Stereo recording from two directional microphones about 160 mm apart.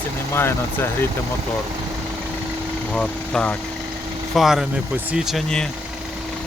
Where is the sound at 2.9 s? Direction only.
5° left (ahead or behind).